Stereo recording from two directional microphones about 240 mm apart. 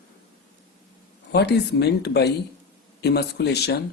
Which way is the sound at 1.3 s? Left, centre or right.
Left.